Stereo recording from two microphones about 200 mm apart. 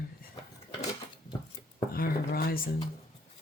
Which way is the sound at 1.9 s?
50° left (ahead or behind).